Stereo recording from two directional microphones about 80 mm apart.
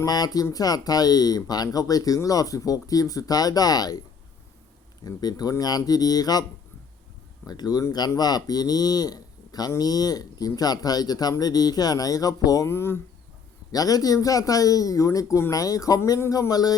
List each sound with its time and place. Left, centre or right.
0.0 s speech: left
5.0 s speech: left
7.4 s speech: left
12.6 s speech: left
13.7 s speech: left